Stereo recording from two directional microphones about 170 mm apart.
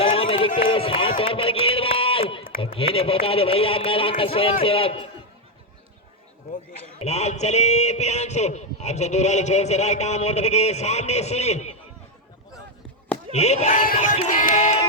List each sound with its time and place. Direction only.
0.0 s a sound: 30° left (ahead or behind)
2.6 s speech: 35° left (ahead or behind)
7.0 s speech: 40° left (ahead or behind)
13.3 s crowd: 40° left (ahead or behind)